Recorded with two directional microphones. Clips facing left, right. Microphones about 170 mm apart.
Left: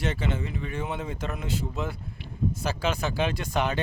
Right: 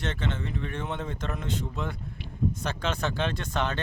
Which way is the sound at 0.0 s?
10° left (ahead or behind).